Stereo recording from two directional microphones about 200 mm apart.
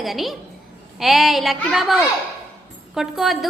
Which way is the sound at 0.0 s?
Centre (ahead or behind).